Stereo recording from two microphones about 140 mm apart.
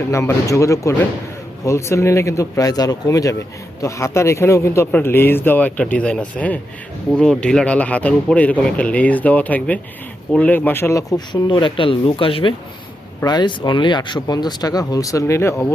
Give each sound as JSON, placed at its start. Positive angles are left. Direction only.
{"t": 0.1, "sound": "speech", "side_deg": 20}
{"t": 11.3, "sound": "speech", "side_deg": 35}